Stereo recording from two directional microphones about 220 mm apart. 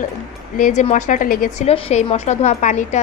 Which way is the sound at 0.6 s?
35° left (ahead or behind).